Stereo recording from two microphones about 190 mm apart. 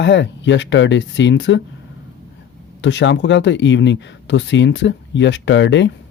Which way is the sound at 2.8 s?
75° left (ahead or behind).